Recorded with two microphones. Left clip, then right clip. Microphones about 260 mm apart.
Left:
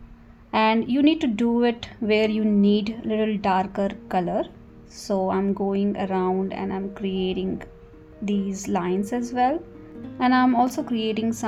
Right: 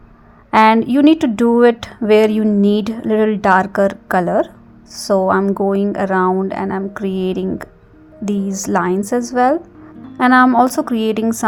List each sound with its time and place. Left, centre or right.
0.5 s a woman's voice: right